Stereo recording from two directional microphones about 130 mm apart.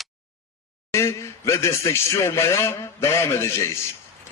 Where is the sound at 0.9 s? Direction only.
20° left (ahead or behind).